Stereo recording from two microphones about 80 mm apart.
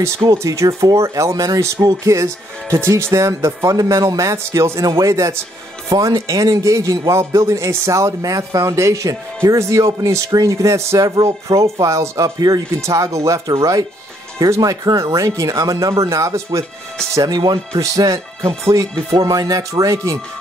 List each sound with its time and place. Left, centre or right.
0.0 s a man's voice: right
5.9 s a man's voice: right
12.4 s speech: right
12.8 s a man's voice: right
17.3 s a man's voice: right